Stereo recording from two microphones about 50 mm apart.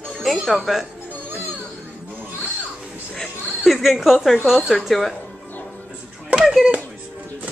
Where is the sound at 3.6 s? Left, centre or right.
Centre.